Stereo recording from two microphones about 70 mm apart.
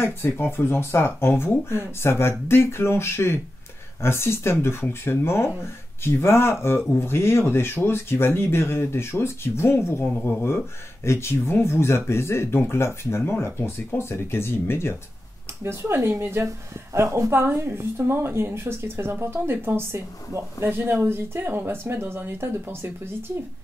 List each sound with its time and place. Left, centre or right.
0.0 s speech: left
15.6 s a woman's voice: right